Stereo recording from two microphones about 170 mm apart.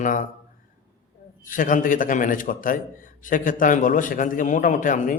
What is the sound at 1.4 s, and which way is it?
A man's voice, 50° left (ahead or behind).